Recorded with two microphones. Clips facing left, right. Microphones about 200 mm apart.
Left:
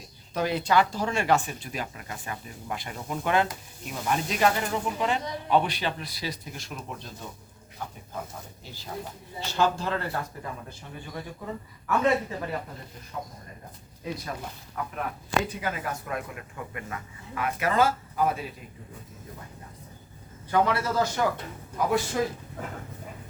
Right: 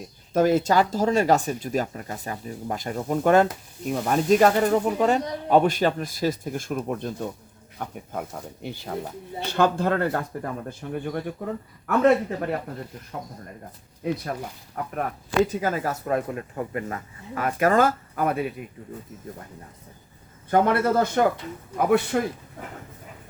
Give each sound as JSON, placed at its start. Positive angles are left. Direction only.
{"t": 0.3, "sound": "speech", "side_deg": -45}
{"t": 14.0, "sound": "speech", "side_deg": -55}
{"t": 14.8, "sound": "speech", "side_deg": -45}
{"t": 20.5, "sound": "speech", "side_deg": -55}